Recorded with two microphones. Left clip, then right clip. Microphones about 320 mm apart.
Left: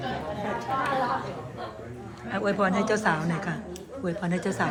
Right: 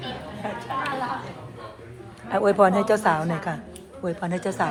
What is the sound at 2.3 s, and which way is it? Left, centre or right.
A woman's voice, centre.